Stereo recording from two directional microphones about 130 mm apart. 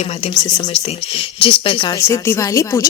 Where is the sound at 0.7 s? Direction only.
45° left (ahead or behind).